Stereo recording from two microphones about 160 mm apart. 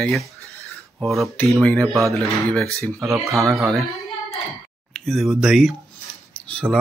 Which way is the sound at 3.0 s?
20° right (ahead or behind).